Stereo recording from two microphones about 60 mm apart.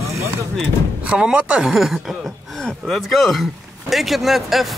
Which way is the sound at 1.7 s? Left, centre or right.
Centre.